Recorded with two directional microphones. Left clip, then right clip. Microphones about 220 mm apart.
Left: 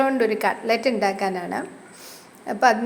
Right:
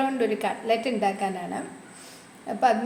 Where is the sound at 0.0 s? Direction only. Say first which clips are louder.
Left 5 dB; 20° left (ahead or behind).